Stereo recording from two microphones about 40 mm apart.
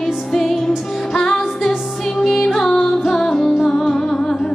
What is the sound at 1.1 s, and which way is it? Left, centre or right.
Music, centre.